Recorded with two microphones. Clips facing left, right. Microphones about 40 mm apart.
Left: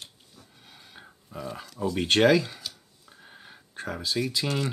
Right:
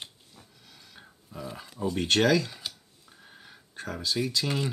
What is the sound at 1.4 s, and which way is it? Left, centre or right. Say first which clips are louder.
Speech: left 3 dB; centre.